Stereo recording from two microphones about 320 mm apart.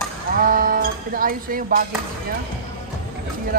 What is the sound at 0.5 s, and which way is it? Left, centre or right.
Music, right.